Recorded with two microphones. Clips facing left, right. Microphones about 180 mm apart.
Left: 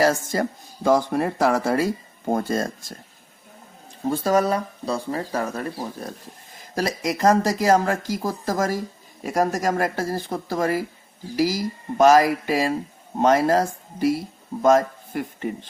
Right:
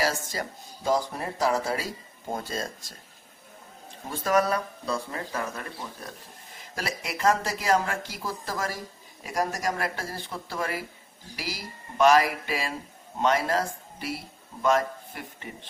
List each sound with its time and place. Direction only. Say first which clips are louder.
0.0 s speech: left 8 dB; 50° left (ahead or behind)
4.1 s speech: left 4 dB; 30° left (ahead or behind)